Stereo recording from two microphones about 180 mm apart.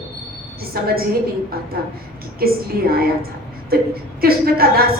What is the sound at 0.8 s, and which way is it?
Speech, 60° right (ahead or behind).